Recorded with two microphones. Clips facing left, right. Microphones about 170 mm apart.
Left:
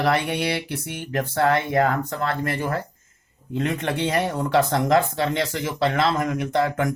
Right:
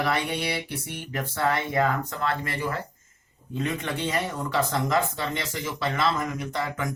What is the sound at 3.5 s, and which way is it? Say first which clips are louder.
Speech: left 5 dB; 65° left (ahead or behind).